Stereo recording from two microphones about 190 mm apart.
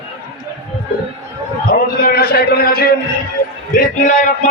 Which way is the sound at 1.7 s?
50° left (ahead or behind).